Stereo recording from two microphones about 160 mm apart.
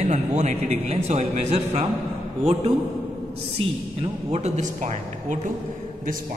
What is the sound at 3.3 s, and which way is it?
A man's voice, 35° right (ahead or behind).